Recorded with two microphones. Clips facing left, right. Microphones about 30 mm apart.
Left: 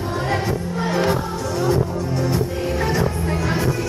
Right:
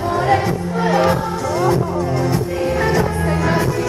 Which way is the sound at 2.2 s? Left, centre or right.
Centre.